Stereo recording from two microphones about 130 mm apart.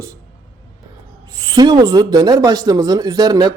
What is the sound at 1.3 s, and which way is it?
Speech, 30° right (ahead or behind).